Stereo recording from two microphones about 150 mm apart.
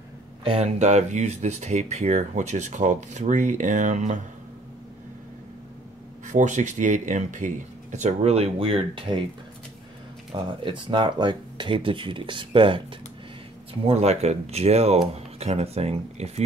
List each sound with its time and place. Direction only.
0.4 s speech: 40° right (ahead or behind)
6.2 s speech: 55° right (ahead or behind); by 9.2 s 35° right (ahead or behind)
10.3 s speech: 35° right (ahead or behind)
13.8 s speech: 45° right (ahead or behind)